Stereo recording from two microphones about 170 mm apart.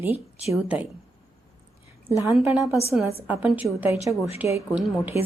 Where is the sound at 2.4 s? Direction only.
10° right (ahead or behind).